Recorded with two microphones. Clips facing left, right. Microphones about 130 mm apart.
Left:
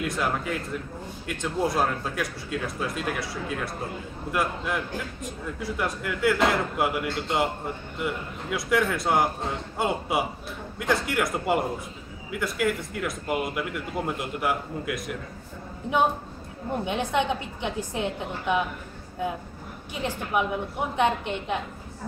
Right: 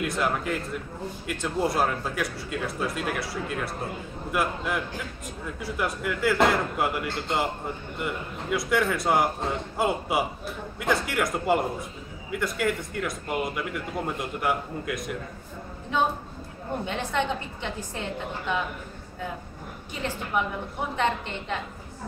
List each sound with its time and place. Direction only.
0.0 s a man's voice: centre (ahead or behind)
16.8 s a woman's voice: 15° left (ahead or behind)
19.9 s a woman's voice: 15° left (ahead or behind)